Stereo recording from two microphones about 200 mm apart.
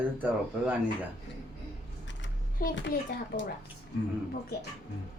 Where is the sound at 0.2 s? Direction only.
10° right (ahead or behind).